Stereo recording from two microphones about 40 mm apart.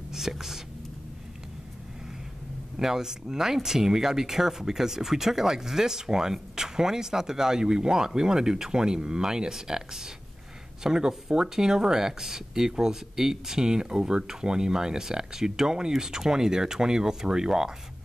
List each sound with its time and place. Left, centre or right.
0.1 s whispering: centre
2.8 s speech: centre